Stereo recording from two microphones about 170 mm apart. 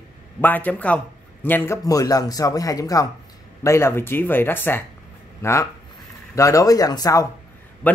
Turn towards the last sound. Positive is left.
turn(degrees=10)  # may be behind; listen again after turning